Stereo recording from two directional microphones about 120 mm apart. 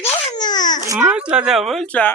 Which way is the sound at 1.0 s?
10° right (ahead or behind).